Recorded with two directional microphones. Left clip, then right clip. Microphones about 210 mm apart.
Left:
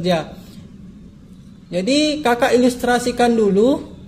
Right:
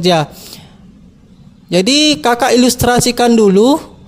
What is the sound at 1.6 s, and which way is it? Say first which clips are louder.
A man's voice: right 7 dB; 45° right (ahead or behind).